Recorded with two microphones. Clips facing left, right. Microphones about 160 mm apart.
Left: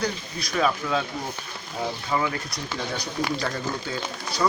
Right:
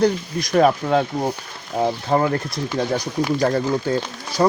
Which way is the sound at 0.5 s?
55° right (ahead or behind).